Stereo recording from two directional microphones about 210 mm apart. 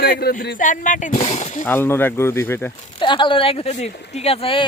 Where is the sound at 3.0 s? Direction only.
25° left (ahead or behind).